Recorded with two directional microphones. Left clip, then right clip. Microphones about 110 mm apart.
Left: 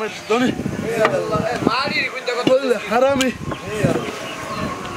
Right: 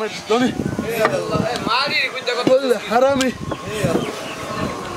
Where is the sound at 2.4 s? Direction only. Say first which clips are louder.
Right 1 dB; 5° left (ahead or behind).